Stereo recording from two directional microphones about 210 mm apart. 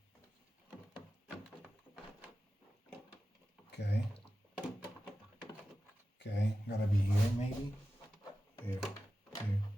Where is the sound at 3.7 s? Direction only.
55° left (ahead or behind).